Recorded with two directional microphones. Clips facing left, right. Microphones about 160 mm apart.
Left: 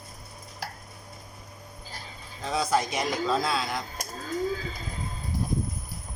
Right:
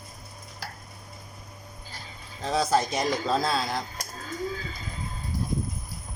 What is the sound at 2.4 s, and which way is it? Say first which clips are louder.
Speech: right 2 dB; 35° right (ahead or behind).